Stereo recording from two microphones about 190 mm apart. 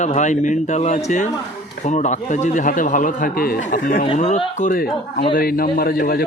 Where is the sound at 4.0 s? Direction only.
35° left (ahead or behind).